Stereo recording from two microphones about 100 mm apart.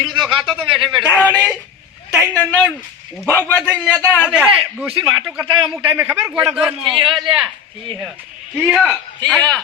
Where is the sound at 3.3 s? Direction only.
25° left (ahead or behind).